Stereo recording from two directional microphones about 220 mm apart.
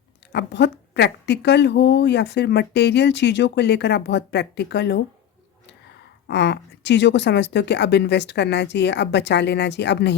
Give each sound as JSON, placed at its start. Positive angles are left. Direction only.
{"t": 0.3, "sound": "a woman's voice", "side_deg": 50}
{"t": 6.2, "sound": "a woman's voice", "side_deg": 50}